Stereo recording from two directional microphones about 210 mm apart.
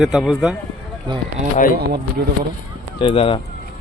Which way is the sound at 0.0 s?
Centre (ahead or behind).